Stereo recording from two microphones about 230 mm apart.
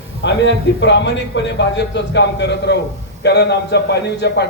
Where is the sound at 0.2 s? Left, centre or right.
Left.